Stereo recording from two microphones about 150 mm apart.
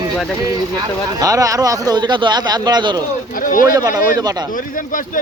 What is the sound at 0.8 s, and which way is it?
Speech, 25° right (ahead or behind).